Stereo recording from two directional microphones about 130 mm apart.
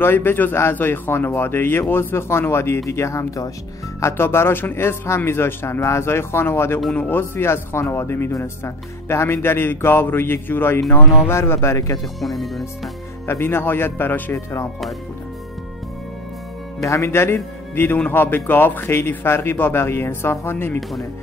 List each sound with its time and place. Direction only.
0.0 s speech: 15° left (ahead or behind)
12.2 s speech: centre (ahead or behind)
13.3 s speech: 20° left (ahead or behind)
16.8 s speech: 20° left (ahead or behind)